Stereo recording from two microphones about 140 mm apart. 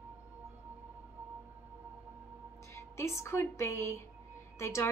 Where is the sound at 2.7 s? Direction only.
20° left (ahead or behind).